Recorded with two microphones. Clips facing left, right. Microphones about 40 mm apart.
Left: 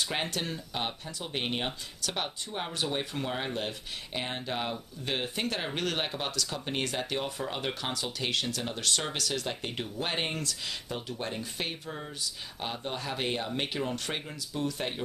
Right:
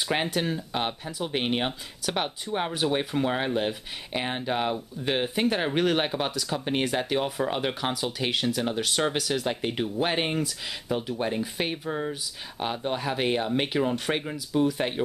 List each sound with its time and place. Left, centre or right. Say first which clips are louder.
0.1 s speech: right 6 dB; centre